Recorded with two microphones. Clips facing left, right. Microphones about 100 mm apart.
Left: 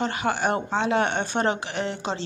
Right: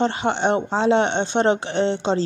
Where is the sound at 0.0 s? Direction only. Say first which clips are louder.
Right 4 dB; 30° right (ahead or behind).